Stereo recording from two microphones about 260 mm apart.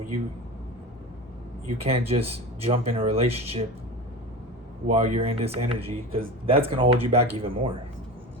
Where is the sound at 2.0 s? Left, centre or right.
Right.